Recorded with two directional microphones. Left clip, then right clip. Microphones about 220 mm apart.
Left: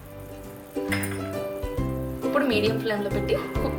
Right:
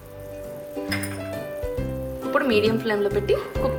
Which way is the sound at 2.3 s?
30° right (ahead or behind).